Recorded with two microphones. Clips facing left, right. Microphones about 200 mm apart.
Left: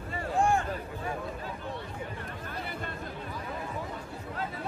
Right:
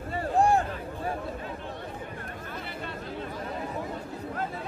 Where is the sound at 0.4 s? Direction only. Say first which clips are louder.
Right 4 dB; 35° right (ahead or behind).